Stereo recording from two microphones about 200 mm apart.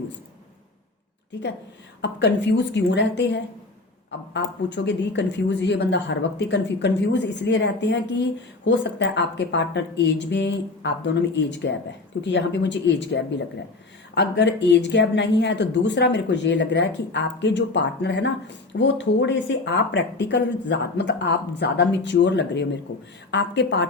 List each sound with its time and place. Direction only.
1.3 s speech: 60° left (ahead or behind)